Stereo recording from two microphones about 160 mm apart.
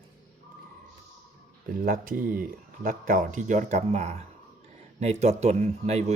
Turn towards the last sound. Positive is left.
turn(degrees=-45)  # may be behind; listen again after turning